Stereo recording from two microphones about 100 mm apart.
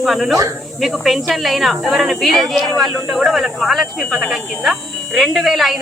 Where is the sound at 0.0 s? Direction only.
Centre (ahead or behind).